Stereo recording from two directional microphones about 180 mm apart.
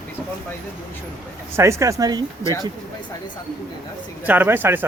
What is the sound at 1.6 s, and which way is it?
Speech, 15° right (ahead or behind).